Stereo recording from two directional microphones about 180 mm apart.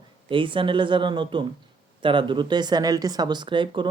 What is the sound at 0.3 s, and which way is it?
Speech, 30° right (ahead or behind).